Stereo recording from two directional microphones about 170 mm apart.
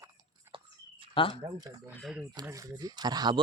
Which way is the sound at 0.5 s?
30° right (ahead or behind).